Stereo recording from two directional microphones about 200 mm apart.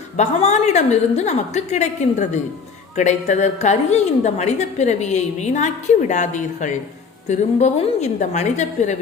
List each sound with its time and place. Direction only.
0.2 s a woman's voice: 35° left (ahead or behind)